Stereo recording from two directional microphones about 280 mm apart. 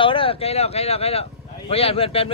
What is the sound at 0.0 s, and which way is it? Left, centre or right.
Speech, centre.